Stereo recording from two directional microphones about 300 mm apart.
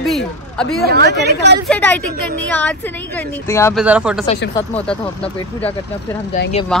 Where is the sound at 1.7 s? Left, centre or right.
Centre.